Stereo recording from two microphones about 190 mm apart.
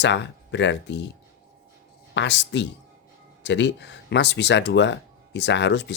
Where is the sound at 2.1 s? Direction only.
70° left (ahead or behind).